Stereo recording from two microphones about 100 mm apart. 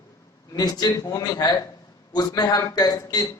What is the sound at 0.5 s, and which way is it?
A man's voice, 40° left (ahead or behind).